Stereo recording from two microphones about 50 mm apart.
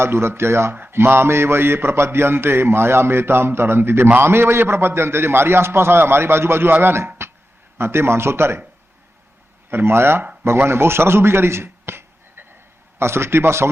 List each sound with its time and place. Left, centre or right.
0.0 s a man's voice: right
0.7 s a man's voice: right
9.6 s a man's voice: right
10.7 s a sound: right
13.0 s a man's voice: right